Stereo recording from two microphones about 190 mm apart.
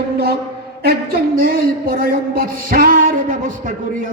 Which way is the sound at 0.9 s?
50° right (ahead or behind).